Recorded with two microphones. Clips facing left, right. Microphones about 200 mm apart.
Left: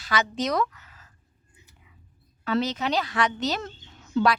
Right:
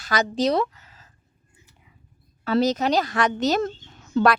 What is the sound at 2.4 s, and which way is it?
A woman's voice, 40° right (ahead or behind).